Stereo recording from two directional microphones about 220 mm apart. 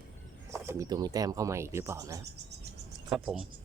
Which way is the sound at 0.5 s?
15° right (ahead or behind).